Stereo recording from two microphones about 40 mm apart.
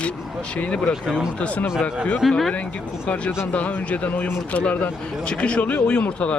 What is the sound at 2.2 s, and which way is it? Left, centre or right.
Speech, centre.